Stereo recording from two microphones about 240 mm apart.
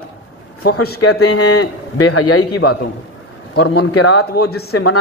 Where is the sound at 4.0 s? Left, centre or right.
Left.